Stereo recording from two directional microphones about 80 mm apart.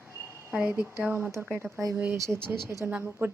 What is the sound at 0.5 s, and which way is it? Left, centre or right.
Speech, centre.